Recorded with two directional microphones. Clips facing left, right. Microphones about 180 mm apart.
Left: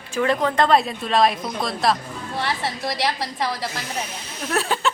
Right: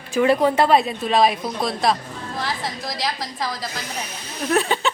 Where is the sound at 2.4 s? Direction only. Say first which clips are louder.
Left 4 dB; 65° left (ahead or behind).